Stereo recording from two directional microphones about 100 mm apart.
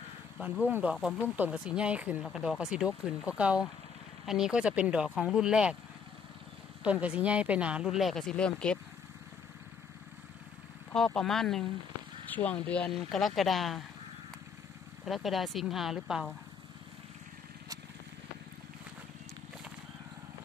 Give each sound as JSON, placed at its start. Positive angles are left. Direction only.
{"t": 0.7, "sound": "speech", "side_deg": -15}
{"t": 2.2, "sound": "speech", "side_deg": 0}
{"t": 6.8, "sound": "speech", "side_deg": -10}
{"t": 10.9, "sound": "speech", "side_deg": 10}
{"t": 12.3, "sound": "speech", "side_deg": 15}
{"t": 12.9, "sound": "speech", "side_deg": 0}
{"t": 15.0, "sound": "speech", "side_deg": 0}